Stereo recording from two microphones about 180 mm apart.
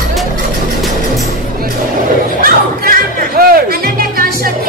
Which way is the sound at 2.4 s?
55° right (ahead or behind).